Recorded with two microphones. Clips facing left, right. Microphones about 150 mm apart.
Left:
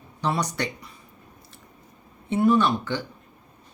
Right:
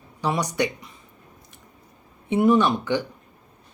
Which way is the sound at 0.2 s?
15° right (ahead or behind).